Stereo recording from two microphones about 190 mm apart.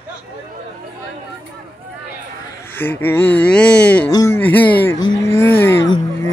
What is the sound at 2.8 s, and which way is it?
Speech, 10° left (ahead or behind).